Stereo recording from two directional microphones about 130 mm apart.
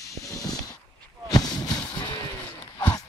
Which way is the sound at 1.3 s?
30° left (ahead or behind).